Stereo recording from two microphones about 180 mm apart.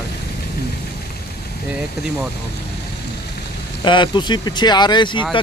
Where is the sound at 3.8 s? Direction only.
25° left (ahead or behind).